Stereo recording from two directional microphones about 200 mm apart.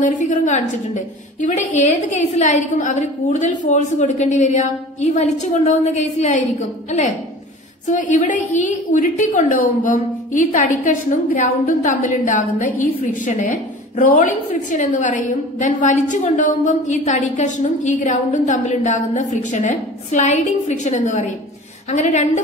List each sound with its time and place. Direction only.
0.0 s a woman's voice: 40° left (ahead or behind)
7.8 s a woman's voice: 40° left (ahead or behind)